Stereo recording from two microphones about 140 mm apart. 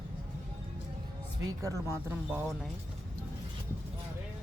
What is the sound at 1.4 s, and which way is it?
Speech, 20° right (ahead or behind).